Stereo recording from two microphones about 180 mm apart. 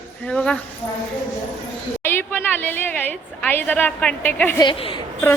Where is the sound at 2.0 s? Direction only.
10° left (ahead or behind).